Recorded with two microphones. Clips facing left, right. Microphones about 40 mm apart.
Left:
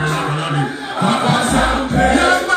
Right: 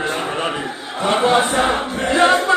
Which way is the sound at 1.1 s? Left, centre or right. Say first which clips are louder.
Right 1 dB; centre.